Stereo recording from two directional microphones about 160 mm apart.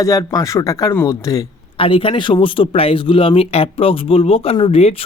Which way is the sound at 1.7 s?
35° left (ahead or behind).